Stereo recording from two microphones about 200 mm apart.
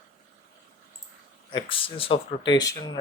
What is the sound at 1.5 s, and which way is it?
Speech, 25° left (ahead or behind).